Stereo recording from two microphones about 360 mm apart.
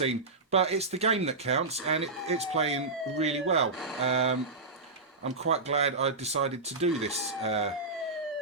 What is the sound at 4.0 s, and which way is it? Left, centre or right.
Speech, centre.